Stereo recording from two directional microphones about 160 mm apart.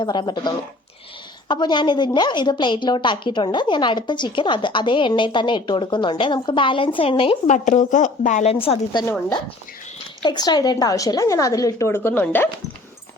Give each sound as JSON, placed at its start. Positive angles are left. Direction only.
{"t": 0.0, "sound": "a woman's voice", "side_deg": 30}
{"t": 7.4, "sound": "a woman's voice", "side_deg": 50}
{"t": 8.6, "sound": "a woman's voice", "side_deg": 30}
{"t": 10.2, "sound": "a woman's voice", "side_deg": 25}